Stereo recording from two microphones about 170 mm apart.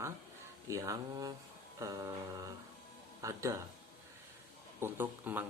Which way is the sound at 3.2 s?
20° right (ahead or behind).